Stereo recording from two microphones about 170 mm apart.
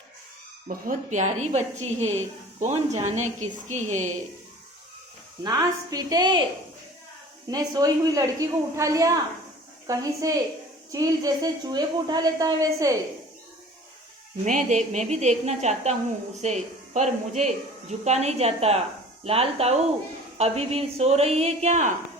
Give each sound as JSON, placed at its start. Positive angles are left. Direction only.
{"t": 0.7, "sound": "a woman's voice", "side_deg": -50}
{"t": 5.4, "sound": "a woman's voice", "side_deg": -25}
{"t": 7.4, "sound": "a woman's voice", "side_deg": -20}
{"t": 14.4, "sound": "a woman's voice", "side_deg": -45}